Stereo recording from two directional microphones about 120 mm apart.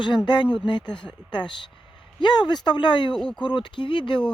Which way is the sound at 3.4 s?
40° left (ahead or behind).